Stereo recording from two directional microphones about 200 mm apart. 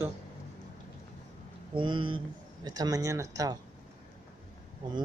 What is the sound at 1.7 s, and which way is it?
Speech, 25° right (ahead or behind).